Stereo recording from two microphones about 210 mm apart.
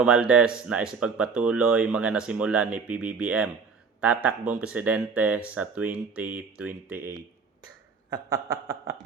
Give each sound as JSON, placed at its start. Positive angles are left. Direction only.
{"t": 0.0, "sound": "speech", "side_deg": -5}
{"t": 8.1, "sound": "speech", "side_deg": -15}